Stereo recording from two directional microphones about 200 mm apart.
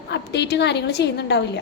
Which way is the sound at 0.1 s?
60° left (ahead or behind).